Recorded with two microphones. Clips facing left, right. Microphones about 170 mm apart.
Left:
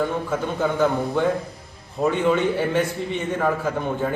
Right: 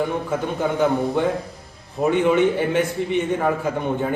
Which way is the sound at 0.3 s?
15° right (ahead or behind).